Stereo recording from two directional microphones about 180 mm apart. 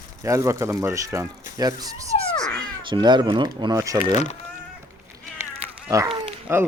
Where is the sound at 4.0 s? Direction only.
40° left (ahead or behind).